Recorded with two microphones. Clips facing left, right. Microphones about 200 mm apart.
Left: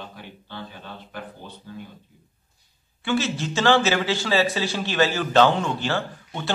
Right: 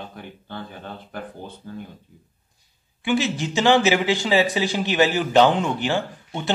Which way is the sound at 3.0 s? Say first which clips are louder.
Right 2 dB; 15° right (ahead or behind).